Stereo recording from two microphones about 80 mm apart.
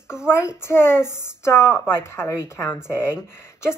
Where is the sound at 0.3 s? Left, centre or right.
Left.